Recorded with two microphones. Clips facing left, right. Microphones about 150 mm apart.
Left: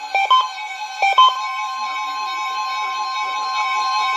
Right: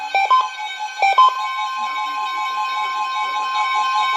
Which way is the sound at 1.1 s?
15° left (ahead or behind).